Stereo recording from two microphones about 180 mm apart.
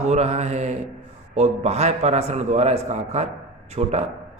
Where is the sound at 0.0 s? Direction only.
35° right (ahead or behind).